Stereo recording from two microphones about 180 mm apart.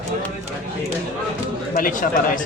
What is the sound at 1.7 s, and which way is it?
Speech, 50° left (ahead or behind).